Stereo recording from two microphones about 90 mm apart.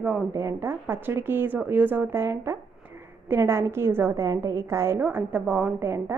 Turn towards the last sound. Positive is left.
turn(degrees=-15)  # may be behind; listen again after turning